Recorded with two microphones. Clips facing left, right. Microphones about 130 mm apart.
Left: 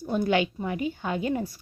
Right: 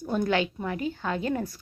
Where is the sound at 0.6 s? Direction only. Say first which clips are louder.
Left 1 dB; 10° left (ahead or behind).